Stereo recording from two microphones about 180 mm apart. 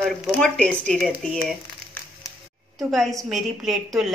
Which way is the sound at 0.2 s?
5° left (ahead or behind).